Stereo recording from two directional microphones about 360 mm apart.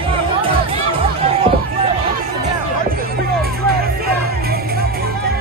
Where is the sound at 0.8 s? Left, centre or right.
Centre.